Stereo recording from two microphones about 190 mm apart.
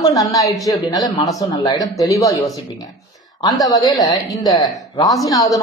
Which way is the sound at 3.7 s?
20° left (ahead or behind).